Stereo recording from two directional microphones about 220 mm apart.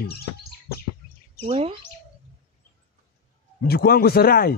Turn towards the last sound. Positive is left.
turn(degrees=45)  # may be behind; listen again after turning